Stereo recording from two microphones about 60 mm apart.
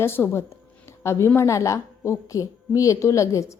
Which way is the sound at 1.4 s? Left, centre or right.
Left.